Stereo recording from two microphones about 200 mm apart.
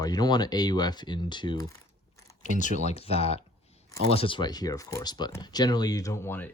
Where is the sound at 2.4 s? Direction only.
40° left (ahead or behind); by 6.5 s 10° left (ahead or behind).